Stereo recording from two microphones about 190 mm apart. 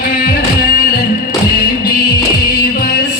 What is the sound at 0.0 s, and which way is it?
Music, 50° left (ahead or behind).